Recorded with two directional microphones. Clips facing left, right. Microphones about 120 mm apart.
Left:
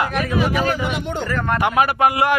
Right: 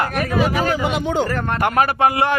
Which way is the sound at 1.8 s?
25° right (ahead or behind).